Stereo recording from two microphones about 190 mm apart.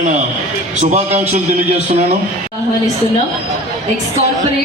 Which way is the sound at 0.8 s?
35° right (ahead or behind).